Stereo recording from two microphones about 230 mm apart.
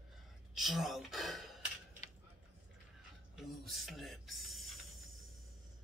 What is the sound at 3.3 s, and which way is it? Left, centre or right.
Speech, centre.